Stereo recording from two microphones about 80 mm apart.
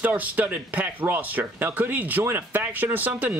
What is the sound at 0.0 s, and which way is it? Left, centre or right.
Speech, centre.